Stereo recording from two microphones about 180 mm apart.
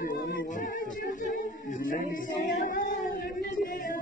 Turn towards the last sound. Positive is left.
turn(degrees=55)  # may be behind; listen again after turning